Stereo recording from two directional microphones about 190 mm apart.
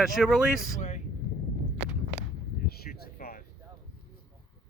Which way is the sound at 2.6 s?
55° left (ahead or behind).